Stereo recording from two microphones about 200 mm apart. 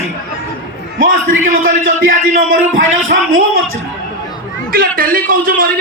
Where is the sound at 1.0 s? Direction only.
80° right.